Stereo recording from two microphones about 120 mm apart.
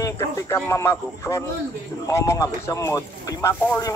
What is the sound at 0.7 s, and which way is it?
Speech, 25° left (ahead or behind).